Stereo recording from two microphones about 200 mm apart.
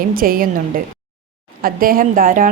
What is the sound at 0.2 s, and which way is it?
Speech, 45° right (ahead or behind).